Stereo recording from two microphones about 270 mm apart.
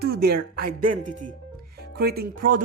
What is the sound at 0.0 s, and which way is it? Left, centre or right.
Speech, right.